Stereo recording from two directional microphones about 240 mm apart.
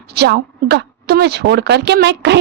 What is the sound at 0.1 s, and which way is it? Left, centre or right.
A woman's voice, right.